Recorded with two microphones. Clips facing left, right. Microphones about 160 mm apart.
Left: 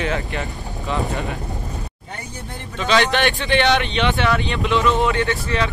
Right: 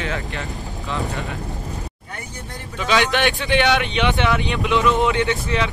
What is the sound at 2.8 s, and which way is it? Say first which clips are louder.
Speech: left 1 dB; 15° right (ahead or behind).